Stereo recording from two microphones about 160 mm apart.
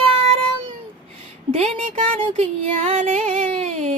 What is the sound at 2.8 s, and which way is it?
Music, 40° right (ahead or behind).